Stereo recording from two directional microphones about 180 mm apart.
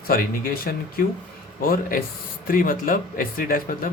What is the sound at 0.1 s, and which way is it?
Speech, 55° left (ahead or behind).